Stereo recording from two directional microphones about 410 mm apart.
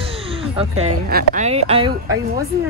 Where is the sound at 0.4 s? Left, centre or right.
Centre.